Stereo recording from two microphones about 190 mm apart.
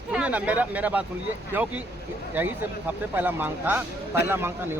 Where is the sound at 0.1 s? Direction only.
5° right (ahead or behind).